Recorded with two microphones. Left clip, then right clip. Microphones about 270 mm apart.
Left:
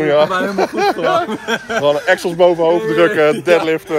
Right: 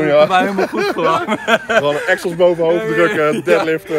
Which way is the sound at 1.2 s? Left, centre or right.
Right.